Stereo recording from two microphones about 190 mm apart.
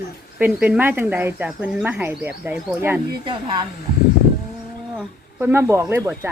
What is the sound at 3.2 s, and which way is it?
Speech, 25° right (ahead or behind).